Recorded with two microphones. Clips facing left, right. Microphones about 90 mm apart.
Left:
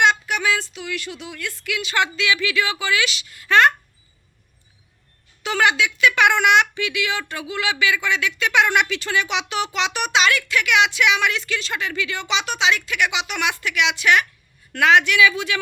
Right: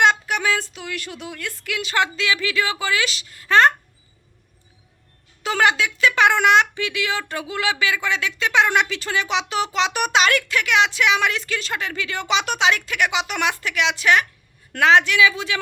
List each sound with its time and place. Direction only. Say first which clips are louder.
0.0 s a woman's voice: even; 40° right (ahead or behind)
5.4 s a child's voice: even; 40° right (ahead or behind)